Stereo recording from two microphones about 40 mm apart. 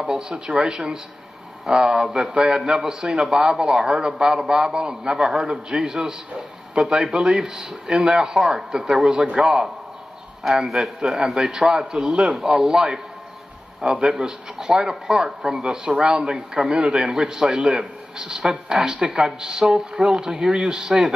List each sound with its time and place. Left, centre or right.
0.0 s a man's voice: right
13.7 s a man's voice: right
14.1 s a man's voice: centre